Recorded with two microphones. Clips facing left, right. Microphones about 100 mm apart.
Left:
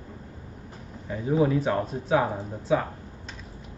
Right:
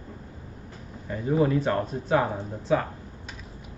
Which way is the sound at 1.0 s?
5° left (ahead or behind).